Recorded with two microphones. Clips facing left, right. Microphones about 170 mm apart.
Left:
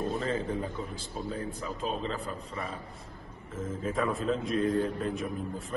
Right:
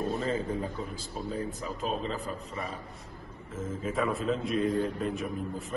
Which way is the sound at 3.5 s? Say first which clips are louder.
Even; 5° right (ahead or behind).